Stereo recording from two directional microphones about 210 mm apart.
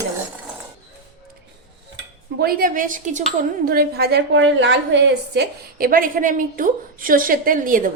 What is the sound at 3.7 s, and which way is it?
A woman's voice, 50° right (ahead or behind).